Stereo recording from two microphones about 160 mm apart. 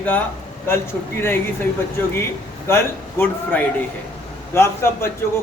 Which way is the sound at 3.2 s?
10° left (ahead or behind).